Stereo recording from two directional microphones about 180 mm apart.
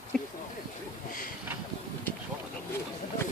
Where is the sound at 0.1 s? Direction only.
5° left (ahead or behind).